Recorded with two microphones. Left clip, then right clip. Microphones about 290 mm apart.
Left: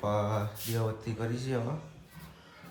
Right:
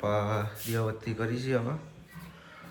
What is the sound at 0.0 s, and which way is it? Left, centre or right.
Speech, centre.